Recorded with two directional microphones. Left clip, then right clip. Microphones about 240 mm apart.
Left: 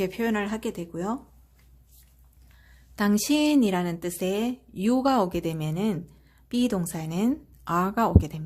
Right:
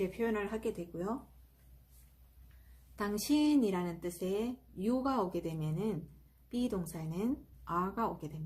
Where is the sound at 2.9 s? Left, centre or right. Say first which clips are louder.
Left 9 dB; left.